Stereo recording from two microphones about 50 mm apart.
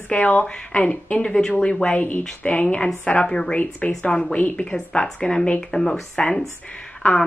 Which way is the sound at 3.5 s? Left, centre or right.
Left.